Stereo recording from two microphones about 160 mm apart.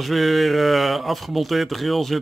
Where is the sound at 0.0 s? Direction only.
Centre (ahead or behind).